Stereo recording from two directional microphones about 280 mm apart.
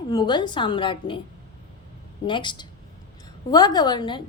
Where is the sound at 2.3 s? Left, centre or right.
Centre.